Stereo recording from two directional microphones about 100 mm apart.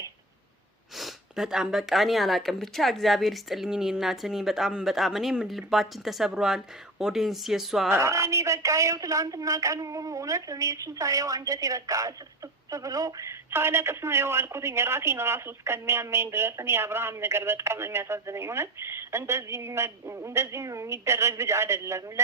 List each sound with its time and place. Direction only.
0.9 s speech: 5° right (ahead or behind)
7.9 s a man's voice: 30° right (ahead or behind)